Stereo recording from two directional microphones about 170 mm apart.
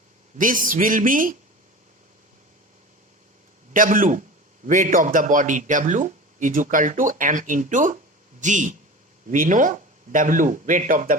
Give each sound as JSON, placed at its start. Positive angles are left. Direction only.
{"t": 0.3, "sound": "speech", "side_deg": -55}
{"t": 3.7, "sound": "speech", "side_deg": -50}